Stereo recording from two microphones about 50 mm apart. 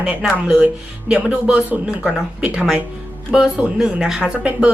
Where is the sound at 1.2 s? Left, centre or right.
Right.